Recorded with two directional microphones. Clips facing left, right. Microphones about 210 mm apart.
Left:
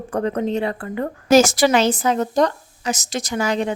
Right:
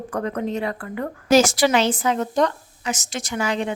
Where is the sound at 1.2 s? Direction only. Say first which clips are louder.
Left 2 dB; 45° left (ahead or behind).